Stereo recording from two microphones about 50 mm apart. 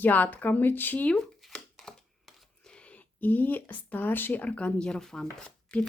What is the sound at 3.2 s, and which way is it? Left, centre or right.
Speech, left.